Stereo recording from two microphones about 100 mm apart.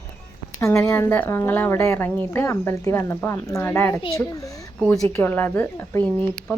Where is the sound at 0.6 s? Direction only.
30° left (ahead or behind).